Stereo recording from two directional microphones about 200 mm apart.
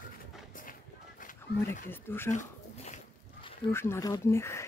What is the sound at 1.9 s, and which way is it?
Speech, 10° left (ahead or behind).